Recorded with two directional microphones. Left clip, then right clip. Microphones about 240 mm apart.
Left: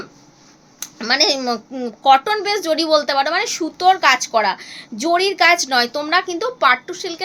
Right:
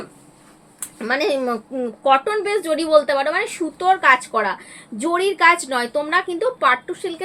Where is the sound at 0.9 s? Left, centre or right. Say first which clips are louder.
Left 3 dB; left.